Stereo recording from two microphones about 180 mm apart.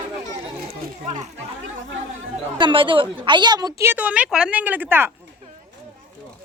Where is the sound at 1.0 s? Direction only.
35° right (ahead or behind).